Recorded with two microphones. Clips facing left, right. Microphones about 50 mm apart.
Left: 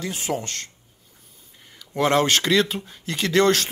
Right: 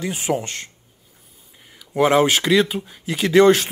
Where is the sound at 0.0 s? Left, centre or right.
Centre.